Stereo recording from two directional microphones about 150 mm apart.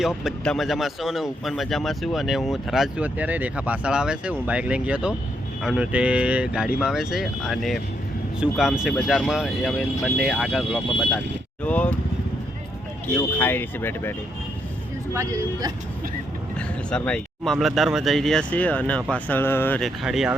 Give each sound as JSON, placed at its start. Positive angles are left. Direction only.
{"t": 0.0, "sound": "speech", "side_deg": 0}
{"t": 11.6, "sound": "speech", "side_deg": 10}
{"t": 13.1, "sound": "speech", "side_deg": 15}
{"t": 15.1, "sound": "speech", "side_deg": -20}
{"t": 16.6, "sound": "speech", "side_deg": 5}
{"t": 19.8, "sound": "speech", "side_deg": 0}